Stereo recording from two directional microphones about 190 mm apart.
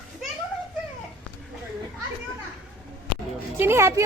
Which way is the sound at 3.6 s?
15° right (ahead or behind).